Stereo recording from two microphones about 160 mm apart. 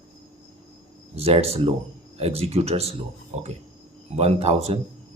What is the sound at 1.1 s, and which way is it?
Speech, 40° right (ahead or behind).